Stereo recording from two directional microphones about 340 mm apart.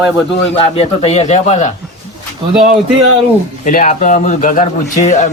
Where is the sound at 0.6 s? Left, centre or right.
Centre.